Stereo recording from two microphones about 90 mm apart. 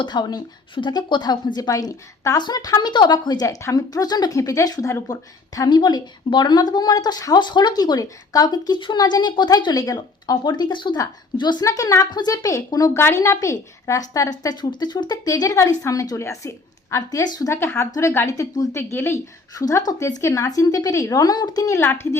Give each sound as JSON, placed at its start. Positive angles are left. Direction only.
{"t": 0.0, "sound": "a woman's voice", "side_deg": 55}
{"t": 0.8, "sound": "a woman's voice", "side_deg": 60}
{"t": 3.4, "sound": "a woman's voice", "side_deg": 35}
{"t": 8.8, "sound": "a woman's voice", "side_deg": 55}
{"t": 11.6, "sound": "a woman's voice", "side_deg": 40}
{"t": 13.0, "sound": "a woman's voice", "side_deg": 30}
{"t": 17.2, "sound": "a woman's voice", "side_deg": 45}
{"t": 17.5, "sound": "a woman's voice", "side_deg": 30}
{"t": 18.7, "sound": "speech", "side_deg": 30}
{"t": 19.5, "sound": "a woman's voice", "side_deg": 40}
{"t": 21.7, "sound": "speech", "side_deg": 30}